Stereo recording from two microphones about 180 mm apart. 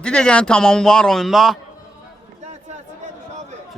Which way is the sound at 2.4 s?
40° right (ahead or behind).